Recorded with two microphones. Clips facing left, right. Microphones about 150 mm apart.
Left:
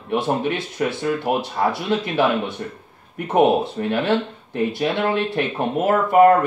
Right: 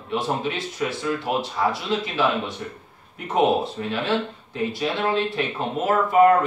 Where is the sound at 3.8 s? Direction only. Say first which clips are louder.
Left 4 dB; 50° left (ahead or behind).